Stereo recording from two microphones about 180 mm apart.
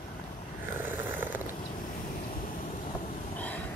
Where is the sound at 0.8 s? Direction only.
10° right (ahead or behind).